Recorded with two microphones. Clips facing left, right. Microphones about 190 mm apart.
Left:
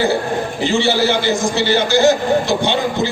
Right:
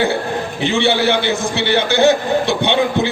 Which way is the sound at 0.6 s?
60° right (ahead or behind).